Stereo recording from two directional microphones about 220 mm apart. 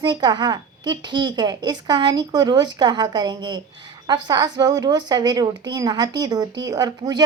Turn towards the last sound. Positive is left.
turn(degrees=-20)  # may be behind; listen again after turning